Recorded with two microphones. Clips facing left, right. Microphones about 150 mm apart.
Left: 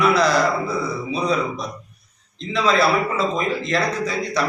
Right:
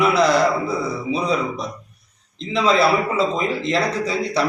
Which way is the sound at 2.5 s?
25° right (ahead or behind).